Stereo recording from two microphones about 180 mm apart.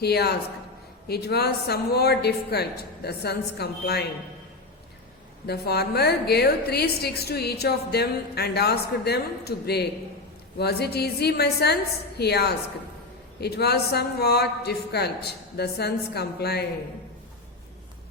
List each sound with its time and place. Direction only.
0.0 s a woman's voice: 65° left (ahead or behind)
5.5 s a woman's voice: 65° left (ahead or behind)